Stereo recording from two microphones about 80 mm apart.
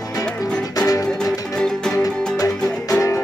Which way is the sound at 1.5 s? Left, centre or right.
Centre.